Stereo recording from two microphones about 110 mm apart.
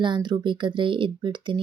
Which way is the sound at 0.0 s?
45° right (ahead or behind).